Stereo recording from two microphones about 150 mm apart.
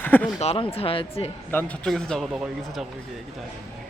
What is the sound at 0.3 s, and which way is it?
Speech, 40° left (ahead or behind).